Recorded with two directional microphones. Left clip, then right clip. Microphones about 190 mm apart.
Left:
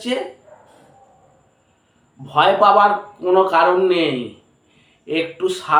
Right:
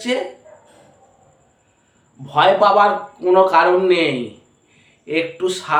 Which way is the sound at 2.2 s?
15° right (ahead or behind).